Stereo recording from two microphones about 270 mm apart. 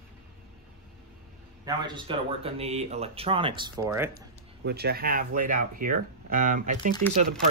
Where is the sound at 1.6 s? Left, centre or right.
Centre.